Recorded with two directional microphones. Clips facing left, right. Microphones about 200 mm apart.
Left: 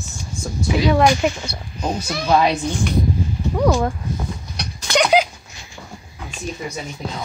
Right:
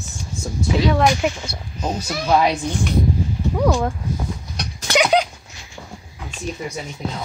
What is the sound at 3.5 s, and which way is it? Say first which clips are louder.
Speech: left 1 dB; centre (ahead or behind).